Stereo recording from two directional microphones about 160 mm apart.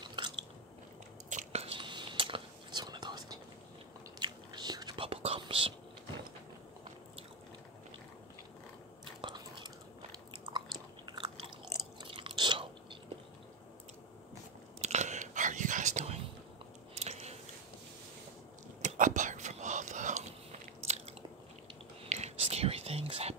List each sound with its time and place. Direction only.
0.0 s biting: 30° right (ahead or behind)
1.3 s whispering: 40° right (ahead or behind)
9.0 s chewing: 30° right (ahead or behind)
11.1 s biting: 25° right (ahead or behind)
12.0 s chewing: 30° right (ahead or behind)
14.8 s whispering: 45° right (ahead or behind)
16.9 s biting: 40° right (ahead or behind)
18.8 s whispering: 50° right (ahead or behind)
20.8 s biting: 45° right (ahead or behind)
22.0 s whispering: 40° right (ahead or behind)